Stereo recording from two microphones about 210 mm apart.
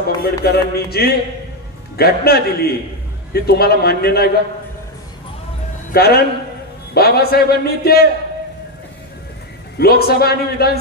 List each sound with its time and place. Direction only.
0.2 s a man's voice: 50° left (ahead or behind)
5.9 s a man's voice: 50° left (ahead or behind)
9.8 s a man's voice: 50° left (ahead or behind)